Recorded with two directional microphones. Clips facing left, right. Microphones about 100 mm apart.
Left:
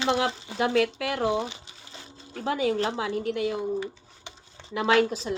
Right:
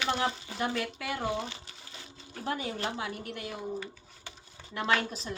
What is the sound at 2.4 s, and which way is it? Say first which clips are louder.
A woman's voice: left 8 dB; 90° left.